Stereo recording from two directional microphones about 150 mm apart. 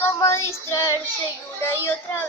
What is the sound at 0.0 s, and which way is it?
Child singing, 20° left (ahead or behind).